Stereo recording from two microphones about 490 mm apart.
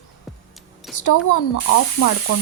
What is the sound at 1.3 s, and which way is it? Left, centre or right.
Speech, left.